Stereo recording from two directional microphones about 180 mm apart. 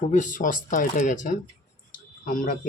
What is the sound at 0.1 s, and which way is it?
Speech, 45° left (ahead or behind).